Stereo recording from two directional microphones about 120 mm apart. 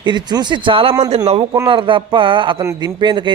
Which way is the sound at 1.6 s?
45° right (ahead or behind).